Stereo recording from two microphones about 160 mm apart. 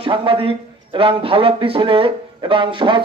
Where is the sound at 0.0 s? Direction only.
35° right (ahead or behind).